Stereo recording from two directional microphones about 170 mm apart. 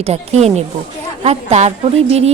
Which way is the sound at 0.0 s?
40° right (ahead or behind).